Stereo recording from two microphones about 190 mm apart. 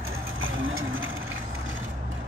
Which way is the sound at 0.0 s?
90° right.